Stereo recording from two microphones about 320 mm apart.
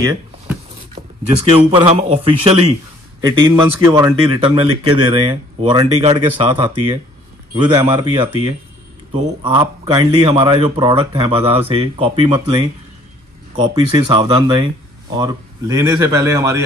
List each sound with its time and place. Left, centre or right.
0.0 s a sound: centre
1.7 s speech: centre
13.7 s speech: centre